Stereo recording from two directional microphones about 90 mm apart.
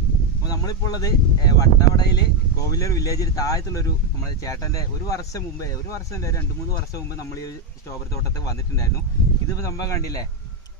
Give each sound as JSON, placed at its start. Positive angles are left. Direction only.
{"t": 0.5, "sound": "speech", "side_deg": 45}
{"t": 9.5, "sound": "speech", "side_deg": 40}